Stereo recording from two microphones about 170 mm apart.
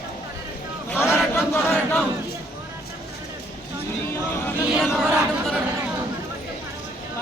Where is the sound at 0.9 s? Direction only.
15° left (ahead or behind).